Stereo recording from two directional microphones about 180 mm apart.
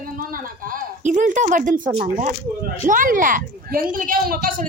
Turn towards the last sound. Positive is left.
turn(degrees=-55)  # may be behind; listen again after turning